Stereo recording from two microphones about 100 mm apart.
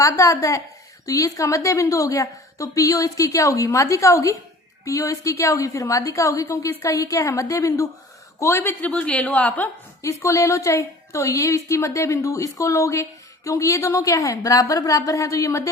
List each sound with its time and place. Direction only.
0.0 s a woman's voice: 30° left (ahead or behind)
8.8 s a woman's voice: 15° left (ahead or behind)
10.0 s a woman's voice: 30° left (ahead or behind)